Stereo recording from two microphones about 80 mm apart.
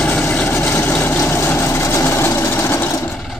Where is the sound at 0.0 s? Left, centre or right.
Centre.